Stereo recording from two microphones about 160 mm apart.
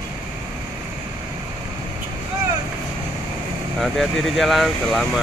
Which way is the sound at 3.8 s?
Centre (ahead or behind).